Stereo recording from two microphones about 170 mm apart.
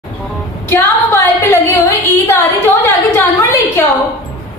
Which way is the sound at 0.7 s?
15° left (ahead or behind).